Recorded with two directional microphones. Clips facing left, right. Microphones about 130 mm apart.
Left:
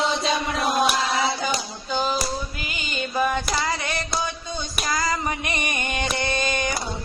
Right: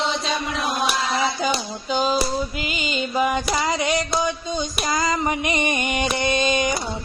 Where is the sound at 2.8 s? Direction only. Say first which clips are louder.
Right 2 dB; 15° right (ahead or behind).